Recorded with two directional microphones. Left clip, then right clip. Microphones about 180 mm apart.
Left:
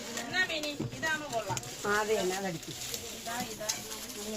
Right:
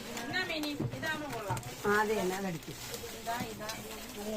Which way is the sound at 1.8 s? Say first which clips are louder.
Right 1 dB; 50° left (ahead or behind).